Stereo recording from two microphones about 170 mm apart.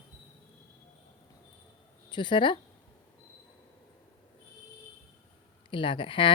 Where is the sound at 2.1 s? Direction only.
25° left (ahead or behind).